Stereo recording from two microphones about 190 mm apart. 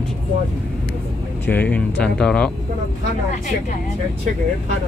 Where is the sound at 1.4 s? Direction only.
10° left (ahead or behind).